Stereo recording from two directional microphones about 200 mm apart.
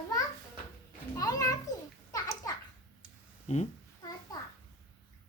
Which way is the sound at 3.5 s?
35° left (ahead or behind).